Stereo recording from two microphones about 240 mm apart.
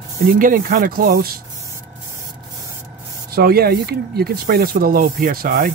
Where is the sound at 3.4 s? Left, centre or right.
Right.